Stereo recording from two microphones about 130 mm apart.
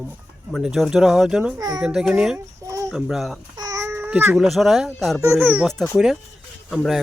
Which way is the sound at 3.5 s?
25° right (ahead or behind).